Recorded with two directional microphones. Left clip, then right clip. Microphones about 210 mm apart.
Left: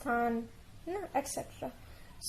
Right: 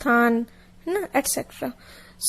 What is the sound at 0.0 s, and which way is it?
Speech, 40° right (ahead or behind).